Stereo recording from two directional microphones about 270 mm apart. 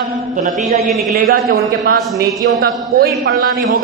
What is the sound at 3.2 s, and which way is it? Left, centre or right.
Speech, right.